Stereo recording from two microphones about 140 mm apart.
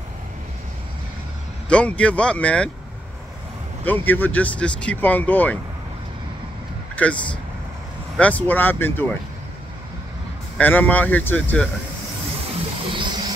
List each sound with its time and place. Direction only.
1.7 s speech: 10° left (ahead or behind)
3.8 s speech: 15° left (ahead or behind)
7.0 s speech: 10° left (ahead or behind)
8.2 s speech: 10° left (ahead or behind)
10.6 s speech: 10° left (ahead or behind)
12.4 s music: 40° right (ahead or behind)